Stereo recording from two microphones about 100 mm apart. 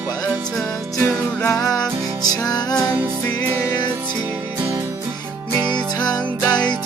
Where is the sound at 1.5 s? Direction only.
35° left (ahead or behind).